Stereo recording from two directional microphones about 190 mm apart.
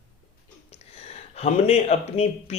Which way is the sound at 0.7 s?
35° left (ahead or behind).